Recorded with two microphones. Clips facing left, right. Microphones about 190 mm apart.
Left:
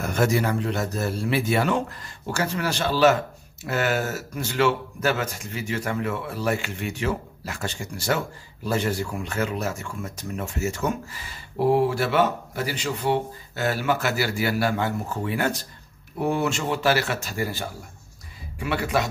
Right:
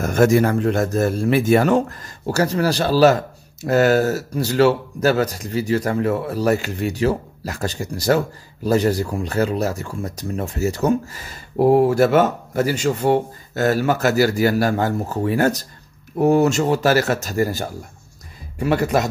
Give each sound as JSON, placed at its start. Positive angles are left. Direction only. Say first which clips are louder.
{"t": 0.0, "sound": "a man's voice", "louder": "right 7 dB", "side_deg": -45}